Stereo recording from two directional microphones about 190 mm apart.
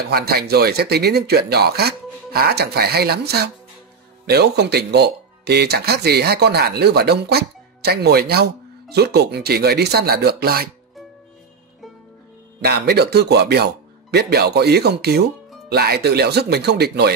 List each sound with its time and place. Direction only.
0.1 s speech: 55° right (ahead or behind)
12.6 s speech: 60° right (ahead or behind)